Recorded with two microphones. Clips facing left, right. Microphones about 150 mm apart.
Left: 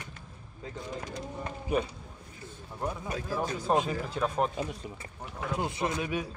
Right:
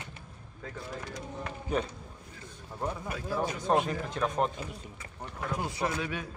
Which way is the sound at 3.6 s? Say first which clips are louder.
Even; 5° left (ahead or behind).